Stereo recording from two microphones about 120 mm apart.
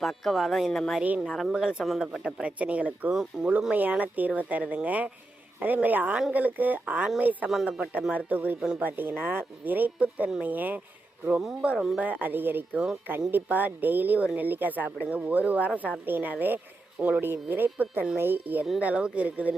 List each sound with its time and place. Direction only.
0.0 s speech: centre (ahead or behind)
7.5 s speech: centre (ahead or behind)
7.9 s speech: 15° right (ahead or behind)